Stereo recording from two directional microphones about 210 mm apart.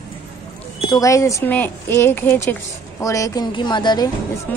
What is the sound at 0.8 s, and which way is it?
Speech, 15° left (ahead or behind).